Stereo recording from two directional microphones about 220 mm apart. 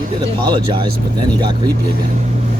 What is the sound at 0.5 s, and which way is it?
Speech, 20° right (ahead or behind).